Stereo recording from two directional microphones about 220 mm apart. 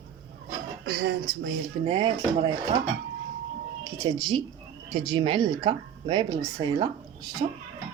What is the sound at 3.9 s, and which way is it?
Speech, 15° right (ahead or behind).